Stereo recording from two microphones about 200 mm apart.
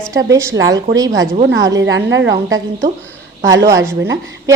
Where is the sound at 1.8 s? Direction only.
65° right (ahead or behind).